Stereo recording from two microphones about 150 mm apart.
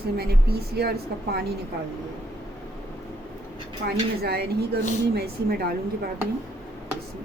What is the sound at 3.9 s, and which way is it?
Speech, 90° right.